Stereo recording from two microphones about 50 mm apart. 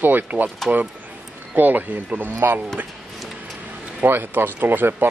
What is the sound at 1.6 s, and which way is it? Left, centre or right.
Speech, right.